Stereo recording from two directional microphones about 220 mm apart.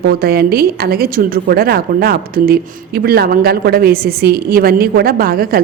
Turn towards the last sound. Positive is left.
turn(degrees=-40)  # may be behind; listen again after turning